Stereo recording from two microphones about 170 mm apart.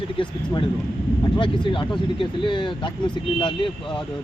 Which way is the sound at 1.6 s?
30° left (ahead or behind).